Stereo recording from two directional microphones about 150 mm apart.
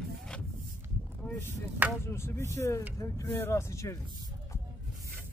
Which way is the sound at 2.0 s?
15° left (ahead or behind).